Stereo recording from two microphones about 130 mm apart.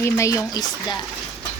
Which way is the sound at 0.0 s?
25° left (ahead or behind).